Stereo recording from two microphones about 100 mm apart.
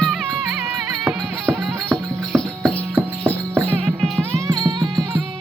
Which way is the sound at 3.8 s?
5° left (ahead or behind).